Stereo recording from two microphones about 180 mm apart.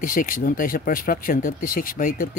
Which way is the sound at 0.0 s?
50° left (ahead or behind).